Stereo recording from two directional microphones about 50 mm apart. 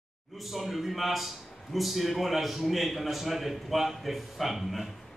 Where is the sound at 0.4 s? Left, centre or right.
Centre.